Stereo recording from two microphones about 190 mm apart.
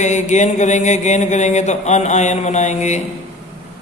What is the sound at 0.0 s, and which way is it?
Mantra, 40° left (ahead or behind).